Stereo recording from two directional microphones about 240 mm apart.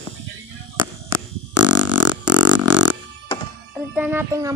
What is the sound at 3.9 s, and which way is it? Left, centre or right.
Speech, centre.